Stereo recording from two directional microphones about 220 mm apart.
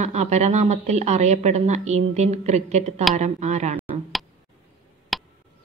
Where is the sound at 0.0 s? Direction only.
30° right (ahead or behind).